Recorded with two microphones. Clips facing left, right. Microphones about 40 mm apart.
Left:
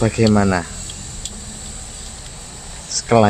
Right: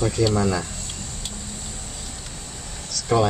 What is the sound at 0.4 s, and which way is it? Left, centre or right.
Speech, left.